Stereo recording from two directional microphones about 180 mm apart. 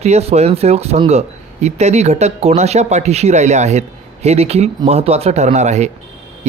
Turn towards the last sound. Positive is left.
turn(degrees=-40)  # may be behind; listen again after turning